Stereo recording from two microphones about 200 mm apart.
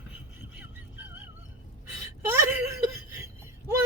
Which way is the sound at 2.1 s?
10° right (ahead or behind).